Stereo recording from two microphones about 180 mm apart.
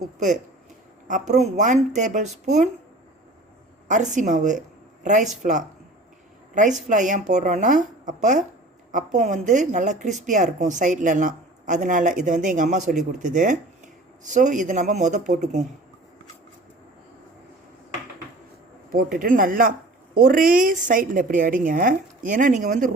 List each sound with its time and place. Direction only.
1.0 s speech: 45° right (ahead or behind)
3.8 s speech: 45° right (ahead or behind)
18.9 s speech: 50° right (ahead or behind)